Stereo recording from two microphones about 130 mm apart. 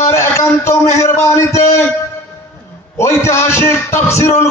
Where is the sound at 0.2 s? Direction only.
20° left (ahead or behind).